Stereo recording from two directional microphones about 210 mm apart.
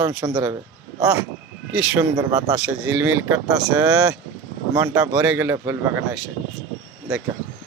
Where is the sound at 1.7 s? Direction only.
5° right (ahead or behind).